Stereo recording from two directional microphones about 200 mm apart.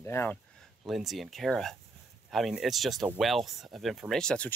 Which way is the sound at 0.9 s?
Centre (ahead or behind).